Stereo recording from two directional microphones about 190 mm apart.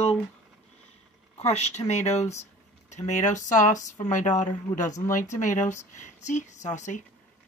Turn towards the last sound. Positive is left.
turn(degrees=40)  # may be behind; listen again after turning